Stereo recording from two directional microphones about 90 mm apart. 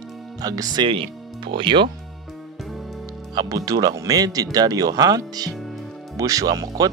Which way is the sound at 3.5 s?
40° right (ahead or behind).